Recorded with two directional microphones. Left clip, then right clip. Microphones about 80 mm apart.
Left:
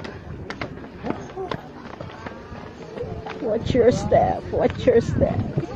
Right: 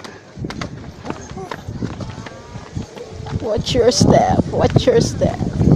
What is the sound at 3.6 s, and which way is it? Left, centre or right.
Speech, right.